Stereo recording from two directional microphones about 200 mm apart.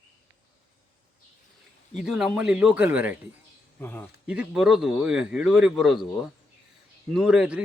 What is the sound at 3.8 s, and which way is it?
Speech, 10° left (ahead or behind).